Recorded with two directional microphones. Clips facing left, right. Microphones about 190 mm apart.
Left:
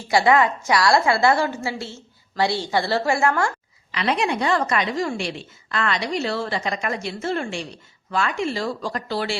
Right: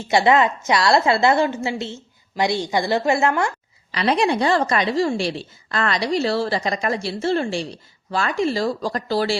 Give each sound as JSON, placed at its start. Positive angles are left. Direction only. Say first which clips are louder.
{"t": 0.0, "sound": "a woman's voice", "louder": "right 1 dB", "side_deg": -20}
{"t": 3.9, "sound": "a woman's voice", "louder": "right 3 dB", "side_deg": -35}